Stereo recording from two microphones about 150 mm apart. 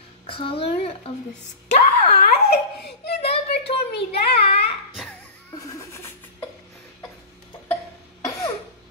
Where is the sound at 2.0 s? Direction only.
90° left.